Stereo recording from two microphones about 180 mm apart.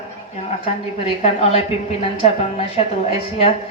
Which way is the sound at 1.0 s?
35° left (ahead or behind).